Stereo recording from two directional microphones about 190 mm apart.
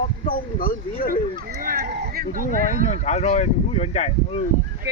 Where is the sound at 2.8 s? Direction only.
35° left (ahead or behind).